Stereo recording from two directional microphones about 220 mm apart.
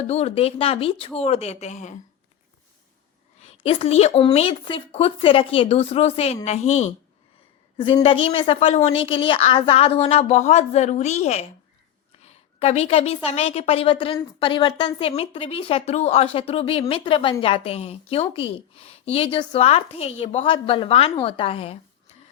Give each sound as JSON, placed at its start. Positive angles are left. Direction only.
{"t": 0.1, "sound": "a woman's voice", "side_deg": 30}
{"t": 3.4, "sound": "a woman's voice", "side_deg": 25}